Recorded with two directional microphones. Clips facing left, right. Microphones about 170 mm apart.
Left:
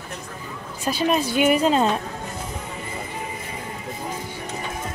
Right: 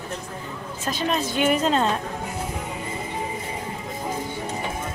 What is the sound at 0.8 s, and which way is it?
A woman's voice, 10° left (ahead or behind).